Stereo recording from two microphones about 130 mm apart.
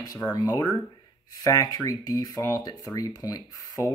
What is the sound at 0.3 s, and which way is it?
Speech, 30° left (ahead or behind).